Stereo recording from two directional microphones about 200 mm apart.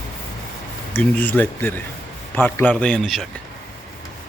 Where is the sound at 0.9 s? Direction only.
10° left (ahead or behind).